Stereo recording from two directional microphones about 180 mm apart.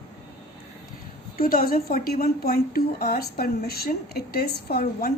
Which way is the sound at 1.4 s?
55° left (ahead or behind).